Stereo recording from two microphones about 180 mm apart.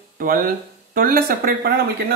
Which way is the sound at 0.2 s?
50° right (ahead or behind).